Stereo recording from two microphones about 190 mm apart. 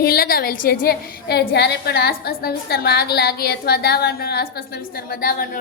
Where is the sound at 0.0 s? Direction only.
55° left (ahead or behind).